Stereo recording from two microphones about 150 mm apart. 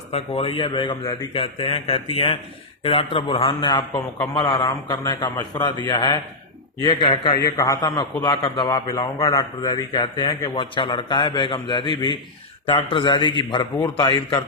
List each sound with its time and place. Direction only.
0.1 s a man's voice: 40° left (ahead or behind)